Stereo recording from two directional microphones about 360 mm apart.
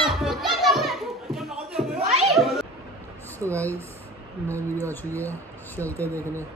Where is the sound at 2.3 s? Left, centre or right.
Centre.